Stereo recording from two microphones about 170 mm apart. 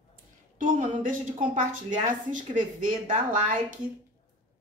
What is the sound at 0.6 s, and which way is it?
A woman's voice, 50° right (ahead or behind).